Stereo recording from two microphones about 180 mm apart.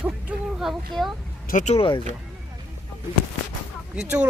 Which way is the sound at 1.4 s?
45° left (ahead or behind).